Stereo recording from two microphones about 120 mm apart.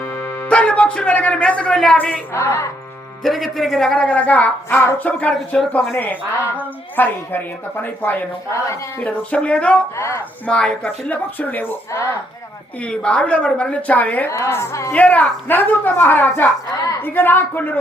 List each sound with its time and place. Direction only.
0.0 s speech: 15° left (ahead or behind)
2.3 s a woman's voice: 25° left (ahead or behind)
3.2 s a woman's voice: centre (ahead or behind)
9.9 s a woman's voice: 25° left (ahead or behind)
10.4 s a woman's voice: 10° left (ahead or behind)
12.8 s a woman's voice: 10° left (ahead or behind); by 14.9 s 25° left (ahead or behind)
14.9 s a woman's voice: 15° left (ahead or behind)